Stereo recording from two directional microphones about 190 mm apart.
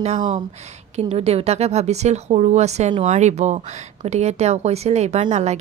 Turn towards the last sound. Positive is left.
turn(degrees=-35)  # may be behind; listen again after turning